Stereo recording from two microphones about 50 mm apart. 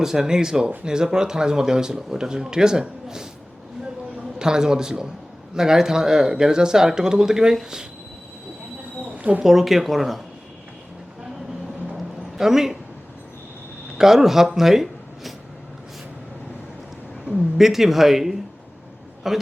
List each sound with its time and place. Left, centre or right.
0.0 s speech: centre
4.4 s speech: centre
9.1 s a sound: right
9.4 s speech: centre
11.9 s a sound: centre
14.0 s speech: centre
17.3 s speech: centre